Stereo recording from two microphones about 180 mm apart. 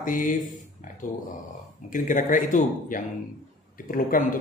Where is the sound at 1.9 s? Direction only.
45° left (ahead or behind).